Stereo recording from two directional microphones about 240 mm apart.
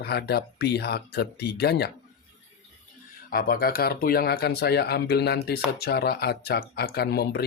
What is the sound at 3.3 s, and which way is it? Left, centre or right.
Speech, left.